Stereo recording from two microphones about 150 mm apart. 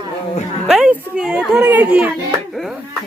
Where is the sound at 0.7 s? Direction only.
5° right (ahead or behind).